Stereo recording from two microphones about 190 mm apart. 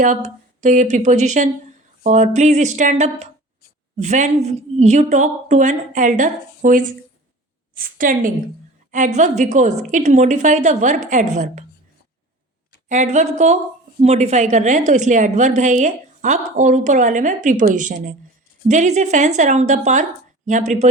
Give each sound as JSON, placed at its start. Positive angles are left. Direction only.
{"t": 0.0, "sound": "a woman's voice", "side_deg": -40}
{"t": 12.9, "sound": "a woman's voice", "side_deg": -40}